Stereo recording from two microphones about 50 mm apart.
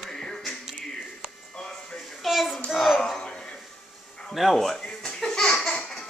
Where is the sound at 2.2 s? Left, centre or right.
Centre.